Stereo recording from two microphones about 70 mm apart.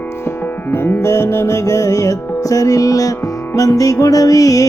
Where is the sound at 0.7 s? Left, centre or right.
Left.